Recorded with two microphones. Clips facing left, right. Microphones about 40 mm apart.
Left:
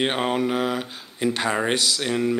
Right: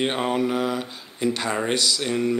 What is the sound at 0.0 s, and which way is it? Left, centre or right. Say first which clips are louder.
Speech: even; centre.